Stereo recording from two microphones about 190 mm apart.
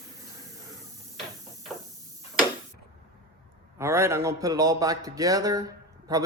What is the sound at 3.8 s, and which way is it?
Speech, 15° right (ahead or behind).